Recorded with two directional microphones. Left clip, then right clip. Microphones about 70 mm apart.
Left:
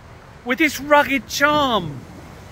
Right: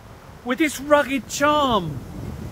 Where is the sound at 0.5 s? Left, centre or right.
Right.